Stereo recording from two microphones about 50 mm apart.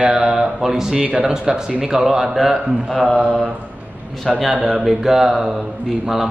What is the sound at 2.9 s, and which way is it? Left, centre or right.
Speech, centre.